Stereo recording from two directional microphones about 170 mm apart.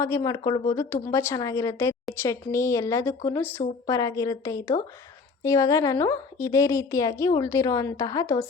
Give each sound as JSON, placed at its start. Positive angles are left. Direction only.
{"t": 0.0, "sound": "a woman's voice", "side_deg": 20}